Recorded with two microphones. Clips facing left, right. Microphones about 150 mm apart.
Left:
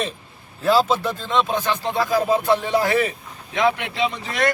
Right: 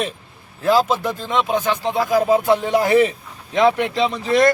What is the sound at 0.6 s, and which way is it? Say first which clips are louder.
Speech: right 1 dB; 15° right (ahead or behind).